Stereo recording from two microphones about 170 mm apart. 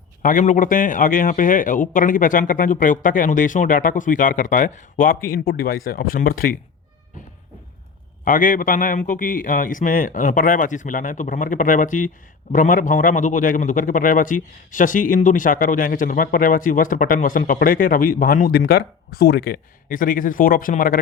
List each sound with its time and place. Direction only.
0.2 s a man's voice: 50° left (ahead or behind)
8.2 s a man's voice: 55° left (ahead or behind)